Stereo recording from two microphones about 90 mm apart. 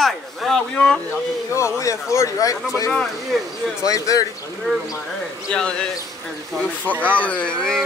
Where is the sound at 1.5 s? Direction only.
35° left (ahead or behind).